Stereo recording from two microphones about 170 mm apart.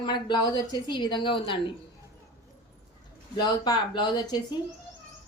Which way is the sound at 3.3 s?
25° left (ahead or behind).